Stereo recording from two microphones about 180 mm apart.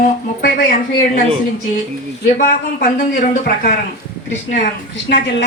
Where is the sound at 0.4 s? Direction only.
50° left (ahead or behind).